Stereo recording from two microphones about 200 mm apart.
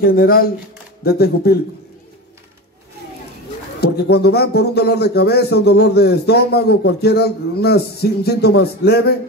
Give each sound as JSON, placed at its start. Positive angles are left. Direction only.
{"t": 0.0, "sound": "speech", "side_deg": 50}
{"t": 3.8, "sound": "speech", "side_deg": 55}